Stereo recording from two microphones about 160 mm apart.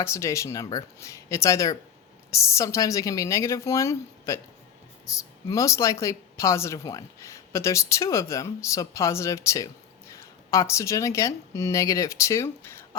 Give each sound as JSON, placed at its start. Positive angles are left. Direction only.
{"t": 0.0, "sound": "speech", "side_deg": 20}
{"t": 5.5, "sound": "a woman's voice", "side_deg": 20}